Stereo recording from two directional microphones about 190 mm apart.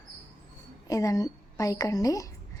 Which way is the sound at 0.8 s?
15° left (ahead or behind).